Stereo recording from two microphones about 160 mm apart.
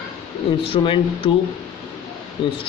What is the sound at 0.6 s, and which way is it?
Speech, 35° left (ahead or behind).